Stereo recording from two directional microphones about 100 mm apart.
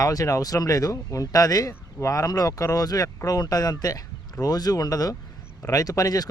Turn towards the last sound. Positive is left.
turn(degrees=40)  # may be behind; listen again after turning